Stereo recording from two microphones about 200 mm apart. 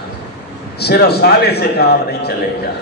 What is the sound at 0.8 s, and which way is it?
A man's voice, 55° left (ahead or behind).